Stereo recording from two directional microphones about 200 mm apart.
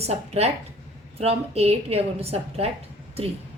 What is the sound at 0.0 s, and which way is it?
A woman's voice, 30° right (ahead or behind).